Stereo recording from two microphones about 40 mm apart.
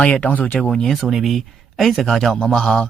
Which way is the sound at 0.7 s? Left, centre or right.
Centre.